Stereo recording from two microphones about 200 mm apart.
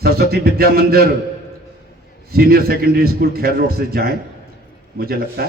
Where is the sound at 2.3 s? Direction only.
50° right (ahead or behind).